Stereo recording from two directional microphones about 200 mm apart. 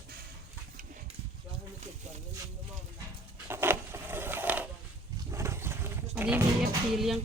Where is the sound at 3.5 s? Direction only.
10° right (ahead or behind).